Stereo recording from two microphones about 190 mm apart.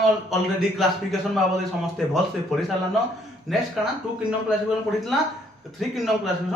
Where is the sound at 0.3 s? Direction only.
Centre (ahead or behind).